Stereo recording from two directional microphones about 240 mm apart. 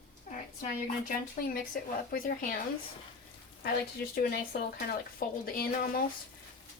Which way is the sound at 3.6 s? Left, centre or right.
Left.